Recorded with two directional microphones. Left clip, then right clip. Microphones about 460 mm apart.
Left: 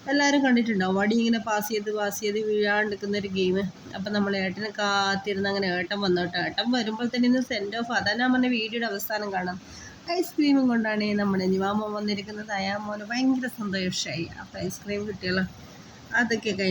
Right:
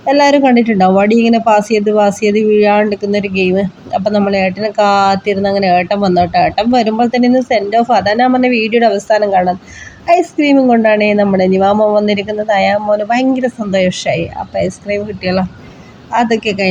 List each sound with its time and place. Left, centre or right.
0.1 s a woman's voice: left